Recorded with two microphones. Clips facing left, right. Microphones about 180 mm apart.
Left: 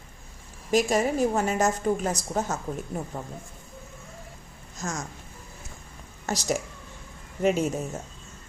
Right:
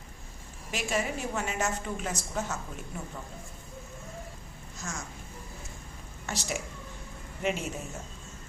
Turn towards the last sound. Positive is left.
turn(degrees=40)  # may be behind; listen again after turning